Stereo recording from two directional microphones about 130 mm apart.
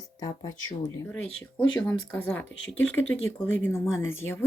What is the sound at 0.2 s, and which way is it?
Speech, 30° left (ahead or behind).